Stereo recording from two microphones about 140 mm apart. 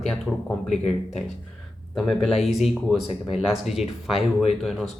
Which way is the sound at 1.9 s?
Centre (ahead or behind).